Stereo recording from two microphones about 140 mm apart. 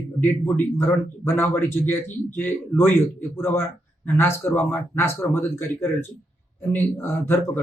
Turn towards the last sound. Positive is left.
turn(degrees=15)  # may be behind; listen again after turning